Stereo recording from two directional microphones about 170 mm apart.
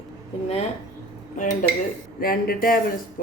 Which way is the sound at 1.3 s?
50° left (ahead or behind).